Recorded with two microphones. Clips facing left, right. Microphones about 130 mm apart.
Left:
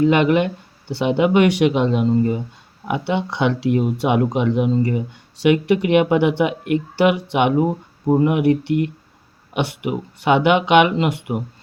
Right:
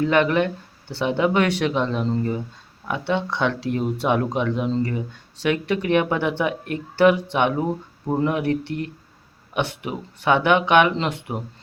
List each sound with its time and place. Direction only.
0.0 s speech: 15° left (ahead or behind)